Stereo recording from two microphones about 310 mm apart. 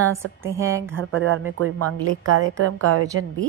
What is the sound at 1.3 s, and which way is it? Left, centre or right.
A woman's voice, right.